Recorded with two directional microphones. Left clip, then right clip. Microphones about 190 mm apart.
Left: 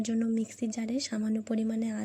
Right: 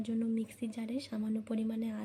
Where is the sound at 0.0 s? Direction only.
25° left (ahead or behind).